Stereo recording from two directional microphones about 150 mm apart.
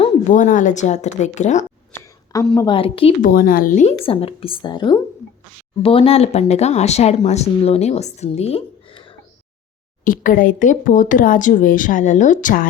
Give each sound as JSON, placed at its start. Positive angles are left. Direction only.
{"t": 0.3, "sound": "speech", "side_deg": 60}
{"t": 1.9, "sound": "a sound", "side_deg": 20}
{"t": 2.6, "sound": "a woman's voice", "side_deg": 35}
{"t": 3.3, "sound": "speech", "side_deg": 75}
{"t": 3.8, "sound": "a woman's voice", "side_deg": 40}
{"t": 10.0, "sound": "speech", "side_deg": 65}